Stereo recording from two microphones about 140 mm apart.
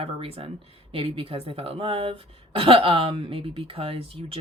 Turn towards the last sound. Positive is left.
turn(degrees=-45)  # may be behind; listen again after turning